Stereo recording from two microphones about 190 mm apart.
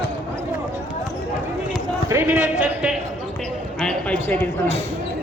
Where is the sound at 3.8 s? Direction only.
10° left (ahead or behind).